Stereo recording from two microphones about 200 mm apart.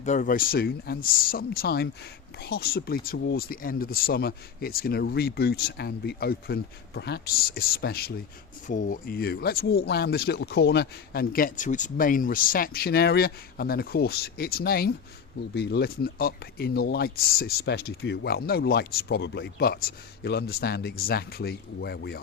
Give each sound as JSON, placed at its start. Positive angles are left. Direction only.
{"t": 0.0, "sound": "speech", "side_deg": 40}
{"t": 8.6, "sound": "speech", "side_deg": 40}